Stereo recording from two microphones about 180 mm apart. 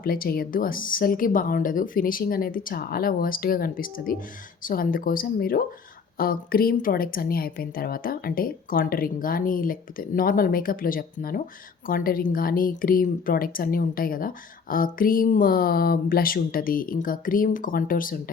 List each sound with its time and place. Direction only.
0.0 s a woman's voice: 55° left (ahead or behind)